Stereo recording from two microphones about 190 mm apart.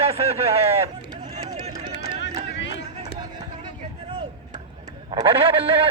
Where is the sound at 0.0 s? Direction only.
30° right (ahead or behind).